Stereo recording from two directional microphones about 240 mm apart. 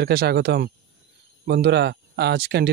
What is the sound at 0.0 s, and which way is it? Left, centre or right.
Speech, right.